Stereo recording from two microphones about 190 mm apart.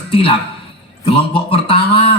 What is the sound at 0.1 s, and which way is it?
A man's voice, 30° left (ahead or behind).